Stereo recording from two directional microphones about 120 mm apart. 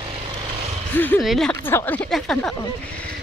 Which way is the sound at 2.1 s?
5° left (ahead or behind).